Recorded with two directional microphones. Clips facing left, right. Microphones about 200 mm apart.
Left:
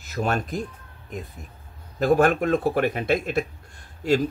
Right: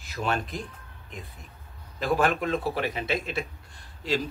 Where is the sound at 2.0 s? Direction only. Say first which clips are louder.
Left 6 dB; 45° left (ahead or behind).